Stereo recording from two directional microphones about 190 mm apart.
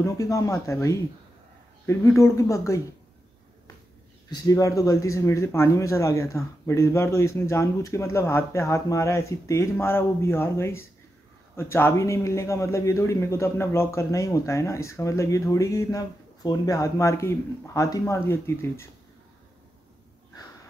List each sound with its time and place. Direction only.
0.0 s a man's voice: 15° left (ahead or behind)
4.3 s a man's voice: 20° left (ahead or behind)